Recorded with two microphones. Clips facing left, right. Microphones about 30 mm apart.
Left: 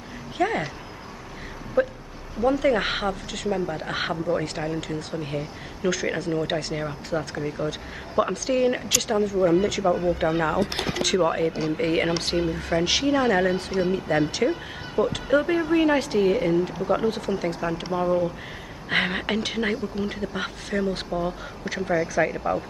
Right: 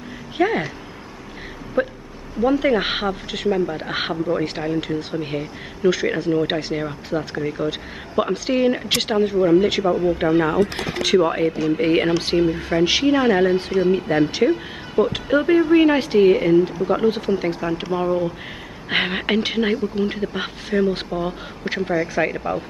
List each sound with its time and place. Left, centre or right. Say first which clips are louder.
0.4 s speech: right 5 dB; right
1.8 s speech: right 1 dB; right
7.3 s speech: right 5 dB; right
8.9 s speech: right 4 dB; right
9.6 s speech: right 5 dB; right
10.0 s speech: right 5 dB; centre
13.0 s speech: right 4 dB; right